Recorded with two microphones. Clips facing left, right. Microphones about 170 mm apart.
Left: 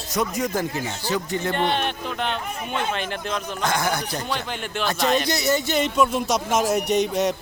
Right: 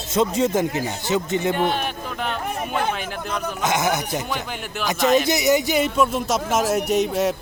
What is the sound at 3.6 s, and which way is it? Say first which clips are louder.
Speech: right 3 dB; 20° right (ahead or behind).